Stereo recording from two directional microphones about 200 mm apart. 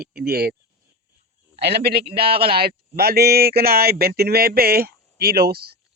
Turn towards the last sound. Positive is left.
turn(degrees=-50)  # may be behind; listen again after turning